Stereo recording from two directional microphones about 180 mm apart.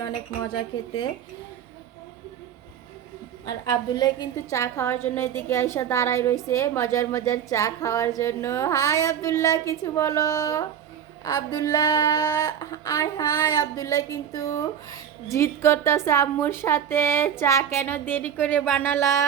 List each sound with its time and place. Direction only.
0.0 s speech: 25° left (ahead or behind)
3.4 s a woman's voice: 20° left (ahead or behind)